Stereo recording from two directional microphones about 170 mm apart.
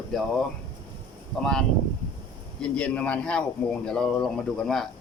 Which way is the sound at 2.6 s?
5° left (ahead or behind).